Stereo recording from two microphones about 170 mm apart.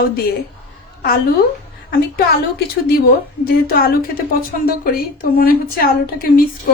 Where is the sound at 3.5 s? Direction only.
60° left (ahead or behind).